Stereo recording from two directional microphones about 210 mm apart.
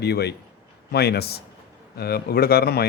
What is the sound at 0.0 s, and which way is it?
Speech, 50° left (ahead or behind).